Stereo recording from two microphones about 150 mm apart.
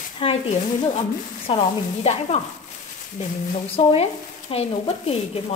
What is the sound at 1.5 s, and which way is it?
Speech, 35° left (ahead or behind).